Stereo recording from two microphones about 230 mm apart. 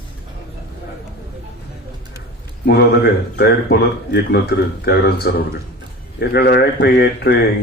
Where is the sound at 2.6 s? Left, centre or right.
Left.